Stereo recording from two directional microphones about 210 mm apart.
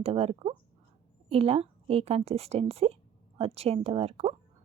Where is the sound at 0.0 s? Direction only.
30° right (ahead or behind).